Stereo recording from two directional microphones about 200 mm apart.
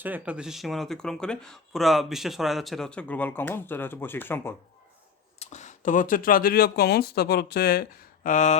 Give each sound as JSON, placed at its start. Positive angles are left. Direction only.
{"t": 0.0, "sound": "speech", "side_deg": -5}
{"t": 5.4, "sound": "speech", "side_deg": 35}